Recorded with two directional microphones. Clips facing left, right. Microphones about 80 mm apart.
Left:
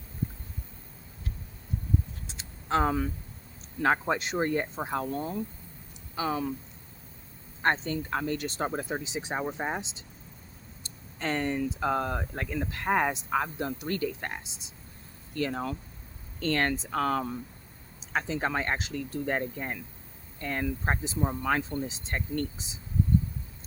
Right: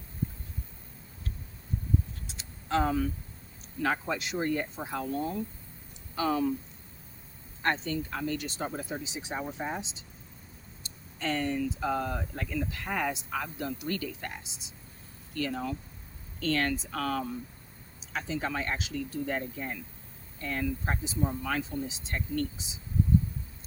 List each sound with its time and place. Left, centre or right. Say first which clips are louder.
2.2 s a sound: left 2 dB; left
3.8 s speech: left 4 dB; left
6.1 s speech: right 2 dB; left
7.6 s speech: left 2 dB; left
11.2 s speech: left 1 dB; left